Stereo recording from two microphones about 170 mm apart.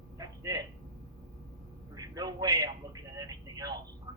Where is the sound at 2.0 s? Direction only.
20° right (ahead or behind).